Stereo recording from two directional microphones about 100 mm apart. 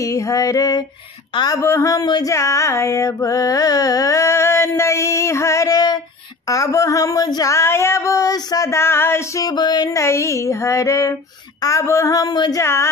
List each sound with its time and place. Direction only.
0.0 s female singing: 35° left (ahead or behind)
1.3 s speech: 45° left (ahead or behind)
1.6 s female singing: 30° left (ahead or behind)
2.3 s mantra: 30° left (ahead or behind)
6.4 s female singing: 35° left (ahead or behind)
7.5 s mantra: 25° left (ahead or behind)
9.4 s a sound: 45° left (ahead or behind)
9.8 s female singing: 30° left (ahead or behind)